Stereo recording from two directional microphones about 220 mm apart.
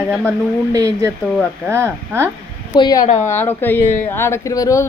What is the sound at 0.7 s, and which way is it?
Speech, 15° right (ahead or behind).